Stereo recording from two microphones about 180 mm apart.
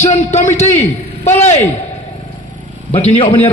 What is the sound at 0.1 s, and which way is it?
A man's voice, 40° left (ahead or behind).